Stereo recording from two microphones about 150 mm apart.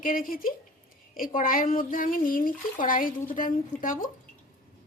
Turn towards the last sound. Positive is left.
turn(degrees=65)  # may be behind; listen again after turning